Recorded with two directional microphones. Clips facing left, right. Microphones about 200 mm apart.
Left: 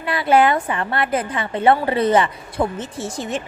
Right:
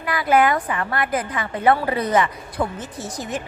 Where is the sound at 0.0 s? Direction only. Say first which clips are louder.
Left 2 dB; 30° left (ahead or behind).